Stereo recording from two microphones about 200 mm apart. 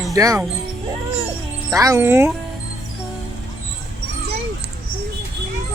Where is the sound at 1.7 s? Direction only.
15° right (ahead or behind).